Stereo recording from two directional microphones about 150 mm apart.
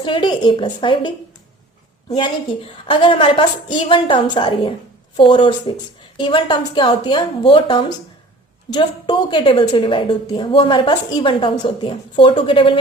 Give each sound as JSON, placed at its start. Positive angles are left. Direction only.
{"t": 0.0, "sound": "a woman's voice", "side_deg": 30}
{"t": 2.1, "sound": "a woman's voice", "side_deg": 35}